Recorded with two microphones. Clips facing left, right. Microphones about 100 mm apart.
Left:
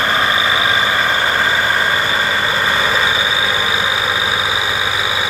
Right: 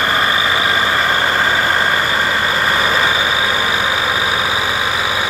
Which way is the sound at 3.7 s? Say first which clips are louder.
Right 1 dB; 10° left (ahead or behind).